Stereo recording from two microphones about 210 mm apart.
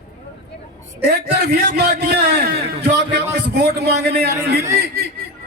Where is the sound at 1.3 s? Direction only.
45° right (ahead or behind).